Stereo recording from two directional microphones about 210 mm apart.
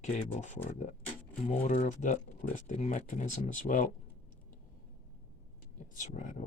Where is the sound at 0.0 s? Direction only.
35° left (ahead or behind).